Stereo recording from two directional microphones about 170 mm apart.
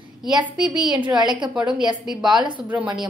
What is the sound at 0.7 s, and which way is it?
Speech, 25° right (ahead or behind).